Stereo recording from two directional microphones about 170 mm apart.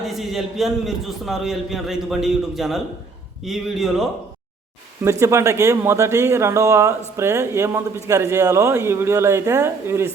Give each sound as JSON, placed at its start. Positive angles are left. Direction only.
{"t": 0.0, "sound": "a man's voice", "side_deg": 0}
{"t": 5.2, "sound": "speech", "side_deg": -15}